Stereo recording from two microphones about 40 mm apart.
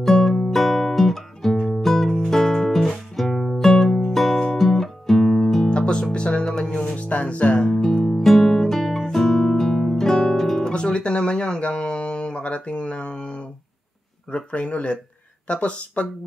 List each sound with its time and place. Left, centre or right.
0.0 s music: centre
5.7 s music: left
6.9 s music: left
7.8 s guitar: centre
10.6 s music: left
14.3 s speech: left